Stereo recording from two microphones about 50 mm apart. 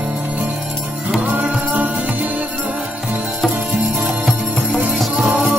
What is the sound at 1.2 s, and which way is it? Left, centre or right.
Music, right.